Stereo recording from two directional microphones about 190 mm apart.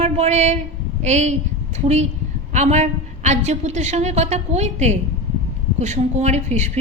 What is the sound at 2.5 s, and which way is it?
A woman's voice, 35° right (ahead or behind).